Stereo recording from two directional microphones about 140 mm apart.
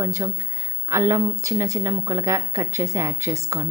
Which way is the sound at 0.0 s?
20° right (ahead or behind).